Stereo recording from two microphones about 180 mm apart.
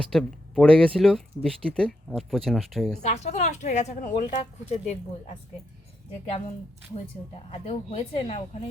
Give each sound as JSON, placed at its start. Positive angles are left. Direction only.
{"t": 0.0, "sound": "speech", "side_deg": 5}
{"t": 3.0, "sound": "a woman's voice", "side_deg": 40}
{"t": 7.5, "sound": "a woman's voice", "side_deg": 35}